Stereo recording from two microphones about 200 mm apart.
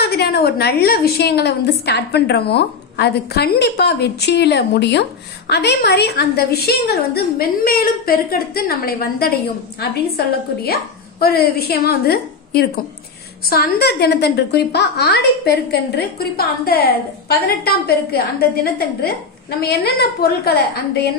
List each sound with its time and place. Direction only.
0.0 s a woman's voice: 55° left (ahead or behind)